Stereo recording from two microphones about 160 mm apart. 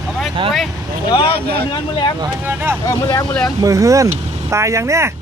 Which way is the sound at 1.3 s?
85° right.